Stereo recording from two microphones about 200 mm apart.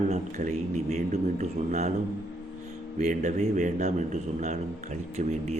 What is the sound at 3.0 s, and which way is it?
A man's voice, 35° right (ahead or behind).